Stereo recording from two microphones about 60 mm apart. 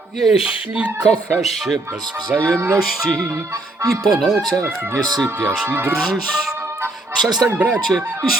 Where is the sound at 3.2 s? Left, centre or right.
Right.